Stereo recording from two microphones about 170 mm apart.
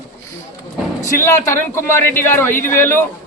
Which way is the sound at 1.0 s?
15° left (ahead or behind).